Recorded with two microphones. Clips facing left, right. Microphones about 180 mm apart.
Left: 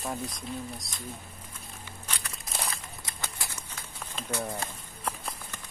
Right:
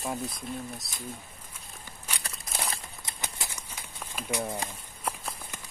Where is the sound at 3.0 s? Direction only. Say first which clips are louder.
Right 1 dB; 15° right (ahead or behind).